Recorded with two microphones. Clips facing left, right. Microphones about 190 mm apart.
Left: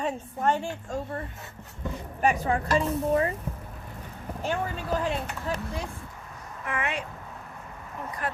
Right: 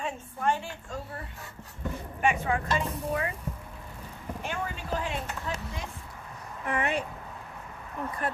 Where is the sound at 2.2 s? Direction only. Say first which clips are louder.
Left 2 dB; 35° left (ahead or behind).